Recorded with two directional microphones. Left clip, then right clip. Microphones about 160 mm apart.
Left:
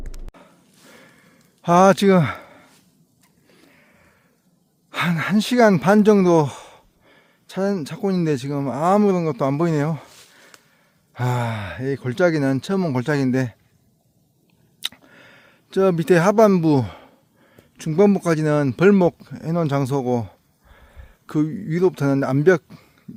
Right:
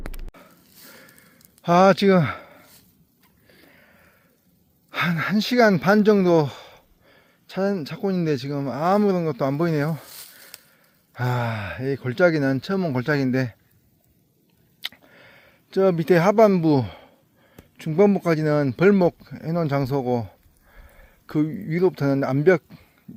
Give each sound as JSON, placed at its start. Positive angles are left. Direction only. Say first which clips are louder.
{"t": 0.3, "sound": "a sound", "louder": "even", "side_deg": 20}
{"t": 4.9, "sound": "speech", "louder": "left 1 dB", "side_deg": 25}
{"t": 11.1, "sound": "speech", "louder": "left 1 dB", "side_deg": 25}
{"t": 14.8, "sound": "speech", "louder": "left 4 dB", "side_deg": 30}